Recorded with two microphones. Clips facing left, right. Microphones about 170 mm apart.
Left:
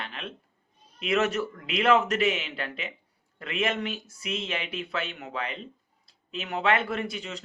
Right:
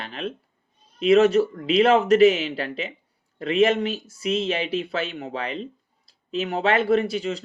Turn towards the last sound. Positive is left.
turn(degrees=-35)  # may be behind; listen again after turning